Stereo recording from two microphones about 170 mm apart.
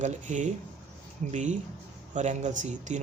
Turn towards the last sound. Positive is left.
turn(degrees=-45)  # may be behind; listen again after turning